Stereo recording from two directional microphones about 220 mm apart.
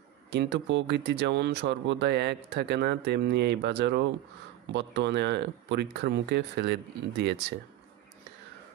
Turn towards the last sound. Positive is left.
turn(degrees=-50)  # may be behind; listen again after turning